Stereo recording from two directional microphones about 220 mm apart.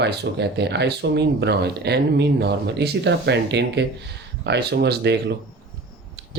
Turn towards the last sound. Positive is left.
turn(degrees=-50)  # may be behind; listen again after turning